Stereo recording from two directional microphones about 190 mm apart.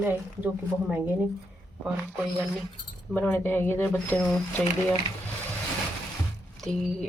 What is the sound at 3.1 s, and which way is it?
Speech, 10° left (ahead or behind).